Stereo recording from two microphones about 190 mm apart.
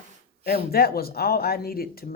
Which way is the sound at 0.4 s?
55° left (ahead or behind).